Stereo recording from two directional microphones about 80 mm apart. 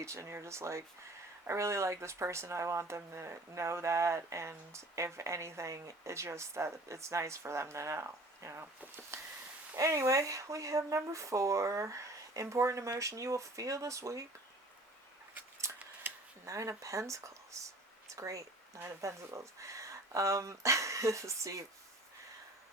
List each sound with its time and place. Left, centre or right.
0.0 s speech: right
15.6 s a sound: right
16.5 s speech: right